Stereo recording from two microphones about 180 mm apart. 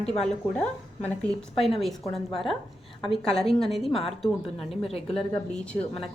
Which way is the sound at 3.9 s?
30° left (ahead or behind).